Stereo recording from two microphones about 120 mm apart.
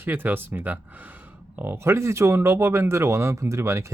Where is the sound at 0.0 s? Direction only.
15° right (ahead or behind).